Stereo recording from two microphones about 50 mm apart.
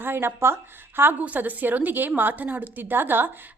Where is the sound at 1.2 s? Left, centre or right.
Right.